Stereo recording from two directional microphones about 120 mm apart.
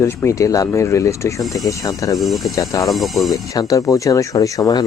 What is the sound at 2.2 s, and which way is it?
Speech, centre (ahead or behind).